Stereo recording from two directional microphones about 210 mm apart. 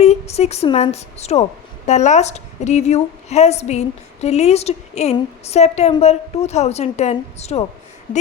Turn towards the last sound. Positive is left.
turn(degrees=30)  # may be behind; listen again after turning